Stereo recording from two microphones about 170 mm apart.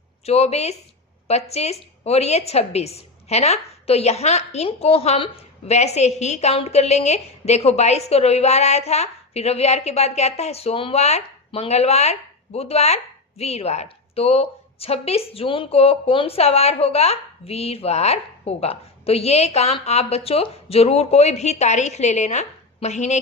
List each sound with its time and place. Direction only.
0.3 s a woman's voice: 40° left (ahead or behind)